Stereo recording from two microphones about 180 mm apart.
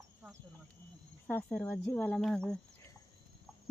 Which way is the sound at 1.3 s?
10° left (ahead or behind).